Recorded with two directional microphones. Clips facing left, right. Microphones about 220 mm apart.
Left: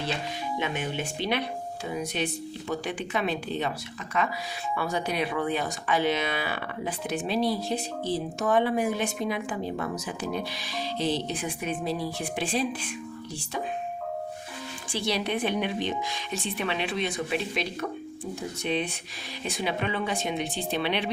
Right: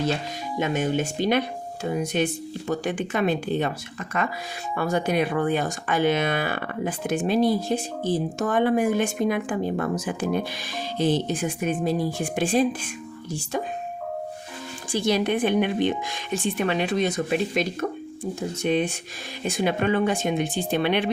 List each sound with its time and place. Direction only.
0.6 s speech: 45° right (ahead or behind)
4.7 s speech: 50° right (ahead or behind)
14.9 s speech: 50° right (ahead or behind)